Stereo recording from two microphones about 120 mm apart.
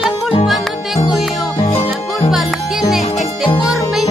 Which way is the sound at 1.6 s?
55° left (ahead or behind).